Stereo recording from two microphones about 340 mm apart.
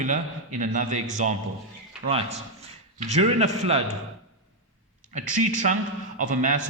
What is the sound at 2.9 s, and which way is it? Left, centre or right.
Speech, centre.